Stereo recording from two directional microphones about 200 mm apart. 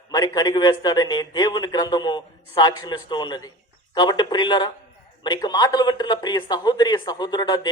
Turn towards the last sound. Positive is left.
turn(degrees=20)  # may be behind; listen again after turning